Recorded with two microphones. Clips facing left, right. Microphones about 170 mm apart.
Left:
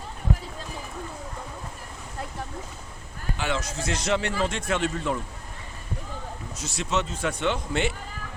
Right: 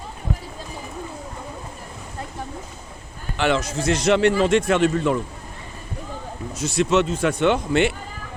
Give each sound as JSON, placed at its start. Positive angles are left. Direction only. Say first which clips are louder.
{"t": 3.3, "sound": "a man's voice", "louder": "right 9 dB", "side_deg": -85}
{"t": 6.6, "sound": "a man's voice", "louder": "right 9 dB", "side_deg": -85}